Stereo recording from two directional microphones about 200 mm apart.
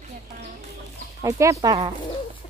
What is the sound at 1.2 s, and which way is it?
Speech, 15° right (ahead or behind).